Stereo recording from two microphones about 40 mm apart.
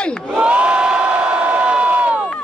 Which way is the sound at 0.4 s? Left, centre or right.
Right.